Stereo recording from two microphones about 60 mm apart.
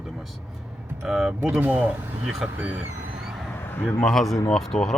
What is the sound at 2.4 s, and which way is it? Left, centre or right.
Speech, centre.